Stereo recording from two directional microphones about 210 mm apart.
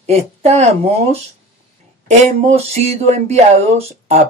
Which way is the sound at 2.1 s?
30° right (ahead or behind).